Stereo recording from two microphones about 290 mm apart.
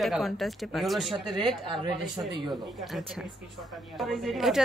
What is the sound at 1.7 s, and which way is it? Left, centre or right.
Speech, centre.